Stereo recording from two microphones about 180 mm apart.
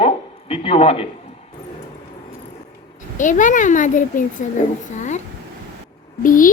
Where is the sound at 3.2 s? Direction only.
45° left (ahead or behind).